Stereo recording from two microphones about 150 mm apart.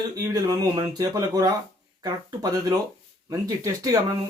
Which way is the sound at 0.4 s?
25° right (ahead or behind).